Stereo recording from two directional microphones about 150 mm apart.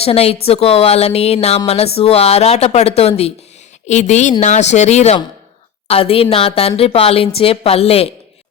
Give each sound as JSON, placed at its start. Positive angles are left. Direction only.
{"t": 0.0, "sound": "a woman's voice", "side_deg": 40}